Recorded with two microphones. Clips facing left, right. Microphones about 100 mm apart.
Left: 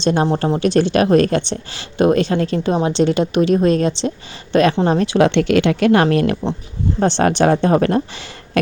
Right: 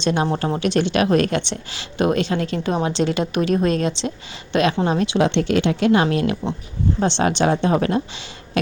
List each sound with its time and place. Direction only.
0.0 s a woman's voice: 35° left (ahead or behind)
5.2 s speech: 70° left (ahead or behind); by 8.2 s 50° left (ahead or behind)